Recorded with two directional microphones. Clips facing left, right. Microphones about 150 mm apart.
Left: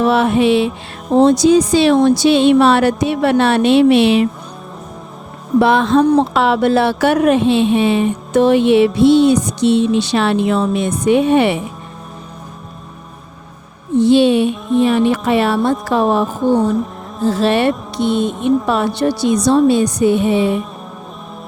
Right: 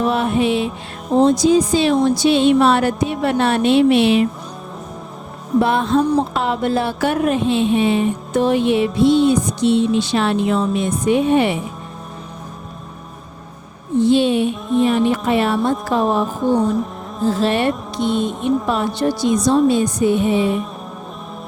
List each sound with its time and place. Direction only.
0.0 s music: 90° left
1.2 s speech: 75° left (ahead or behind); by 4.3 s 90° left
5.5 s speech: 90° left; by 11.6 s 75° left (ahead or behind)
14.0 s speech: 75° left (ahead or behind)
17.2 s speech: 75° left (ahead or behind)